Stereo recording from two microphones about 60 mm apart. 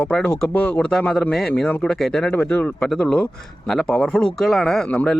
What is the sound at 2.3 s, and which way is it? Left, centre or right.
Speech, left.